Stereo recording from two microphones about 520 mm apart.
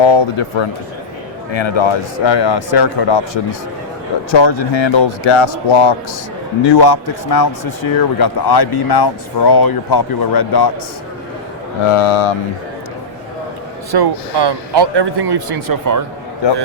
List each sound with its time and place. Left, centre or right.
0.0 s speech: left
4.3 s speech: left
6.6 s a man's voice: left
11.9 s speech: left
13.9 s speech: right